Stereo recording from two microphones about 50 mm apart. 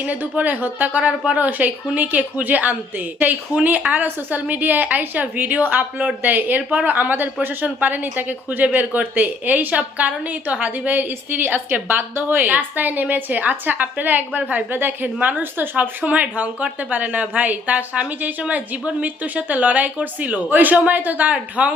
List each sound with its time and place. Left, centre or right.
0.0 s a woman's voice: right
1.5 s speech: right
6.6 s a woman's voice: right
6.8 s speech: right
12.5 s a woman's voice: right